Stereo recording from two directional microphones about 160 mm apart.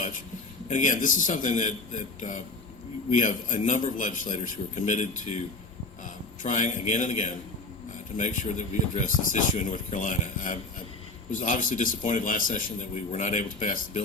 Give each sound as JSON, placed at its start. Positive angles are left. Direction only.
{"t": 0.7, "sound": "speech", "side_deg": 55}
{"t": 6.4, "sound": "speech", "side_deg": 50}